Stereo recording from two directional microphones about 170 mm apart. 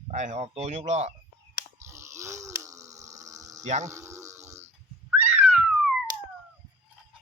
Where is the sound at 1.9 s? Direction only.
15° right (ahead or behind).